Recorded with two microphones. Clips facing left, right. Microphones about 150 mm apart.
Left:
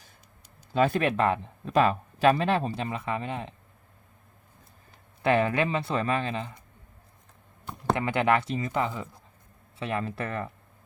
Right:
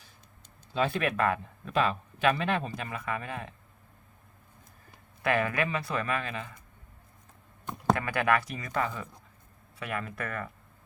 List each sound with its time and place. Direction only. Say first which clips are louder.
0.7 s speech: left 5 dB; 45° left (ahead or behind)
1.0 s speech: left 3 dB; 25° left (ahead or behind)
1.7 s speech: left 5 dB; 40° left (ahead or behind); by 3.5 s 25° left (ahead or behind)
5.2 s speech: left 4 dB; 25° left (ahead or behind)
7.9 s speech: left 3 dB; 25° left (ahead or behind)